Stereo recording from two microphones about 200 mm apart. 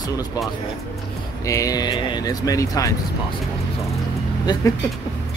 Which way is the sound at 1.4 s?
15° left (ahead or behind).